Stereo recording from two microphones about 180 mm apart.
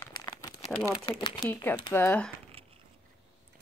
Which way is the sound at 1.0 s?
30° left (ahead or behind).